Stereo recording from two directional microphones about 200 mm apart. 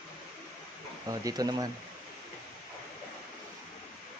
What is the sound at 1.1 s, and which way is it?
Speech, 20° right (ahead or behind).